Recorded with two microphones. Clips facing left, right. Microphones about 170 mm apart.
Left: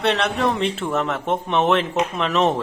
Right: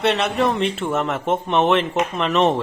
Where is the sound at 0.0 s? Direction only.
Centre (ahead or behind).